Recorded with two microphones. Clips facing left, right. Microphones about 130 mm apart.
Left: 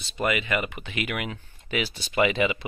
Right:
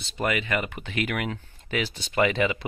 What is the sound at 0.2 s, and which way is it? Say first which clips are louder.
Speech: left 1 dB; 20° left (ahead or behind).